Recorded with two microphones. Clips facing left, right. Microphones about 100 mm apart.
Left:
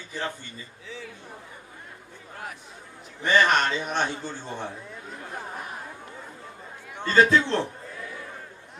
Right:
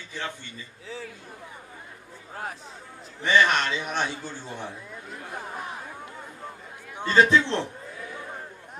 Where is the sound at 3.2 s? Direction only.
45° left (ahead or behind).